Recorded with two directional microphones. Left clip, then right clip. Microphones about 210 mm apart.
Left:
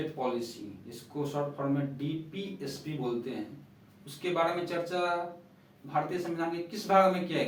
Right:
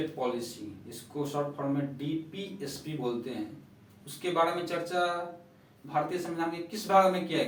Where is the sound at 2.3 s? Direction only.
5° right (ahead or behind).